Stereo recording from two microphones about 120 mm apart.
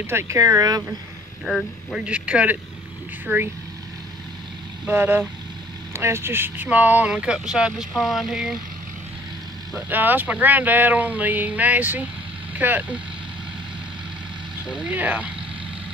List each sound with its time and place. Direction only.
0.0 s speech: 20° right (ahead or behind)
1.4 s speech: 5° left (ahead or behind)
2.0 s speech: 10° right (ahead or behind)
4.8 s speech: 15° right (ahead or behind)
9.8 s speech: 15° right (ahead or behind)
14.7 s speech: 10° right (ahead or behind)